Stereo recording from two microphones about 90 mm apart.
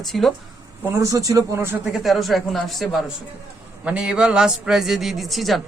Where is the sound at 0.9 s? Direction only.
40° right (ahead or behind).